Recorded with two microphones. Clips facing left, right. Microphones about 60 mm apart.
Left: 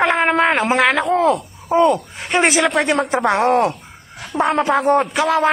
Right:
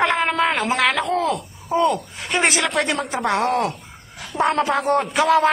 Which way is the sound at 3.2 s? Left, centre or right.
Left.